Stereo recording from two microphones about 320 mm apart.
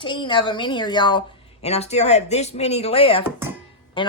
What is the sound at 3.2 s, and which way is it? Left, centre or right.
Speech, centre.